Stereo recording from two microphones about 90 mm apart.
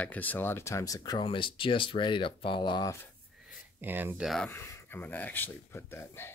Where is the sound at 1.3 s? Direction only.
75° left (ahead or behind).